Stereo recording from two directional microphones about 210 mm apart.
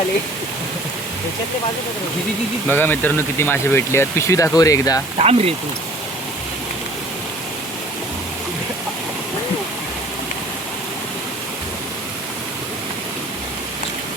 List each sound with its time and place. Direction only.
2.6 s speech: 10° left (ahead or behind)
5.1 s speech: 30° right (ahead or behind)